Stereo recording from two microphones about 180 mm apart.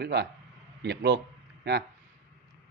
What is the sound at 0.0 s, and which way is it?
A man's voice, 65° right (ahead or behind).